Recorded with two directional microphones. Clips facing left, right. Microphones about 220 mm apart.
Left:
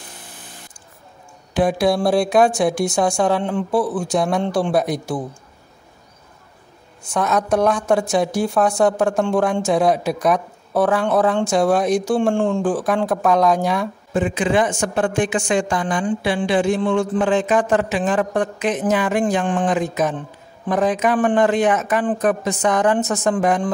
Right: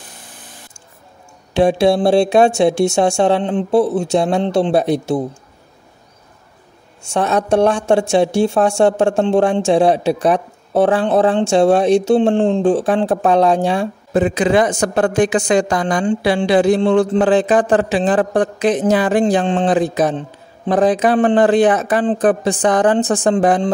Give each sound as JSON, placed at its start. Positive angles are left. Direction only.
{"t": 1.5, "sound": "a woman's voice", "side_deg": -25}
{"t": 7.0, "sound": "a woman's voice", "side_deg": -30}